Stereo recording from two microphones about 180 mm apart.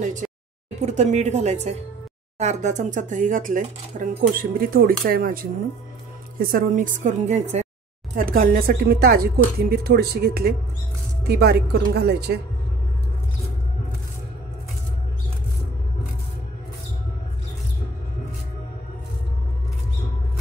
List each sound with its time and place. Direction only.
0.7 s speech: 40° right (ahead or behind)
8.2 s speech: 50° right (ahead or behind)